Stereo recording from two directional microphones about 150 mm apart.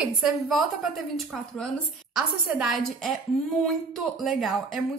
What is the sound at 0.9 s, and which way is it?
A woman's voice, centre (ahead or behind).